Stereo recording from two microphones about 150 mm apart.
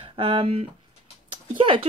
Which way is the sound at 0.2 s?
35° right (ahead or behind).